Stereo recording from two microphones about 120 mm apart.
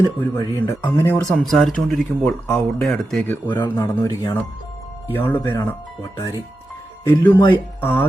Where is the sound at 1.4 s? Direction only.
Centre (ahead or behind).